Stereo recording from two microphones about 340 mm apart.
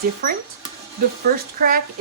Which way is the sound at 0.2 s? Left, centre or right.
Right.